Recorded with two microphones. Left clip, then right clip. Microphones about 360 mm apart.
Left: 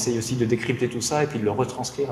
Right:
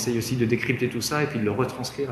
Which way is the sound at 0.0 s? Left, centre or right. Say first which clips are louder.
Left 1 dB; left.